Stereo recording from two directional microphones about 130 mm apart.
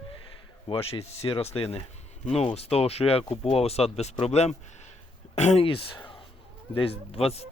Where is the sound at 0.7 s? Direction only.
45° left (ahead or behind).